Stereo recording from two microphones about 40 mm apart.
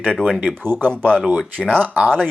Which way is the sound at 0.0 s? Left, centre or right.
Left.